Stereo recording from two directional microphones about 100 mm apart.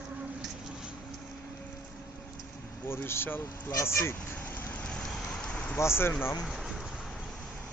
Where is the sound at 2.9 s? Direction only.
25° left (ahead or behind).